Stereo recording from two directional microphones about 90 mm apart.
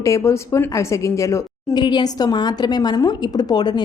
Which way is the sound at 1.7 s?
55° left (ahead or behind).